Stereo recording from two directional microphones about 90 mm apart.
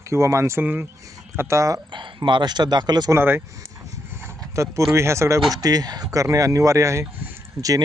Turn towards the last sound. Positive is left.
turn(degrees=-35)  # may be behind; listen again after turning